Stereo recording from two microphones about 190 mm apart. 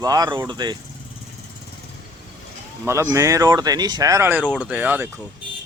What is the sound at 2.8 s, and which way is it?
Speech, 15° right (ahead or behind).